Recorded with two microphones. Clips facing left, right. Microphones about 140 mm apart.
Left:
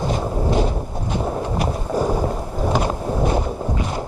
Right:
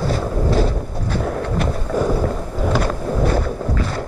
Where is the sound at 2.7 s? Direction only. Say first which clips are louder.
Right 1 dB; 20° left (ahead or behind).